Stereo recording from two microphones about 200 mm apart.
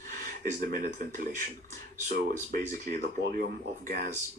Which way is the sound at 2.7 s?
40° right (ahead or behind).